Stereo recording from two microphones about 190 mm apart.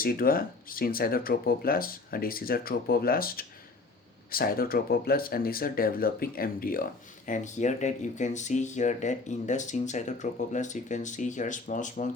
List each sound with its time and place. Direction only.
0.0 s speech: 50° left (ahead or behind)